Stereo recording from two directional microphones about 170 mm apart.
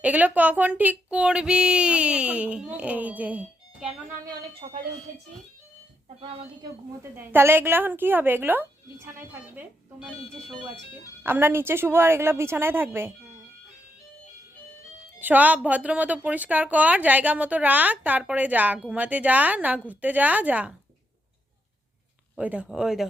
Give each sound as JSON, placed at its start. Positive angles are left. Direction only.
{"t": 0.0, "sound": "speech", "side_deg": -10}
{"t": 4.6, "sound": "speech", "side_deg": -35}
{"t": 6.1, "sound": "speech", "side_deg": -30}
{"t": 7.0, "sound": "speech", "side_deg": -15}
{"t": 11.2, "sound": "speech", "side_deg": -15}
{"t": 15.2, "sound": "speech", "side_deg": -10}
{"t": 22.4, "sound": "speech", "side_deg": -10}